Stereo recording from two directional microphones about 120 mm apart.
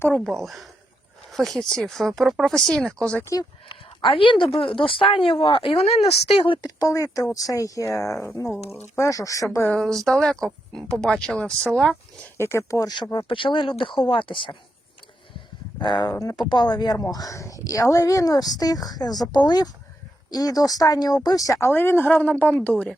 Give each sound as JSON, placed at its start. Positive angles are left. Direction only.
{"t": 0.1, "sound": "speech", "side_deg": 0}
{"t": 3.7, "sound": "speech", "side_deg": 45}
{"t": 6.4, "sound": "speech", "side_deg": 40}
{"t": 9.6, "sound": "a woman's voice", "side_deg": 5}
{"t": 12.4, "sound": "speech", "side_deg": 20}
{"t": 13.2, "sound": "speech", "side_deg": 45}
{"t": 15.8, "sound": "a woman's voice", "side_deg": 40}